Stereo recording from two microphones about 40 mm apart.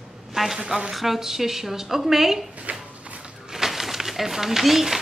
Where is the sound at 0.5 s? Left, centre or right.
Centre.